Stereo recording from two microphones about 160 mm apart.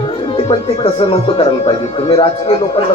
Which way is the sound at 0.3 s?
35° left (ahead or behind).